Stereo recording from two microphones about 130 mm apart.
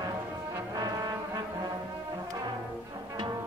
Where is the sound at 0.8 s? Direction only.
30° right (ahead or behind).